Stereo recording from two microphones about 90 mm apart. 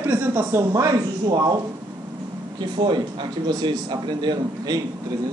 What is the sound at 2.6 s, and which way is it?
A man's voice, 55° right (ahead or behind).